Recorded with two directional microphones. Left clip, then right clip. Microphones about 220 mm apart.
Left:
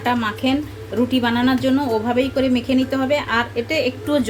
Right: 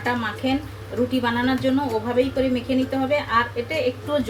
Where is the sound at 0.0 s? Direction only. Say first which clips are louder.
Left 4 dB; 50° left (ahead or behind).